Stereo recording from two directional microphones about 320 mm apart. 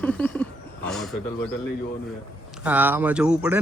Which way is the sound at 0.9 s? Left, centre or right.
Centre.